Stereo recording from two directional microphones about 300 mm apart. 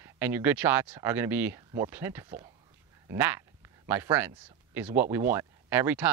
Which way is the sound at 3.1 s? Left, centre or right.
Centre.